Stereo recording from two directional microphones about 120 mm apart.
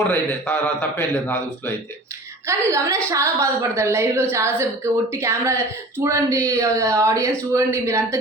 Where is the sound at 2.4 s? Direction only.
25° right (ahead or behind).